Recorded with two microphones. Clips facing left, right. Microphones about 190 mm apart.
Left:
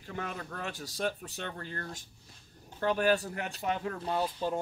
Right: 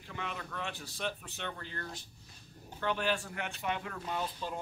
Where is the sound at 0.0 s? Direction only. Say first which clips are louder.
Left 3 dB; 45° left (ahead or behind).